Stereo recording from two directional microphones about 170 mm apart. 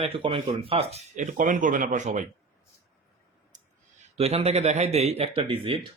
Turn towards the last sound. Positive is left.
turn(degrees=-30)  # may be behind; listen again after turning